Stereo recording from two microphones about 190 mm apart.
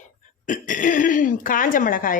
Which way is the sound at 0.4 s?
45° left (ahead or behind).